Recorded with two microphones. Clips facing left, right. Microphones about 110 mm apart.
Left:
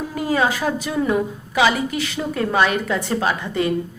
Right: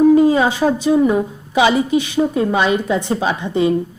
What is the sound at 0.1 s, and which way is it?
A woman's voice, 25° right (ahead or behind).